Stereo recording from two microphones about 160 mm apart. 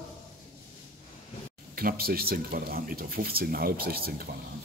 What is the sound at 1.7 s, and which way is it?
Speech, 70° right (ahead or behind).